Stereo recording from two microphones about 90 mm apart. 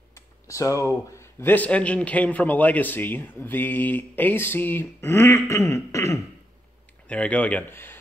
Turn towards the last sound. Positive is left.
turn(degrees=25)  # may be behind; listen again after turning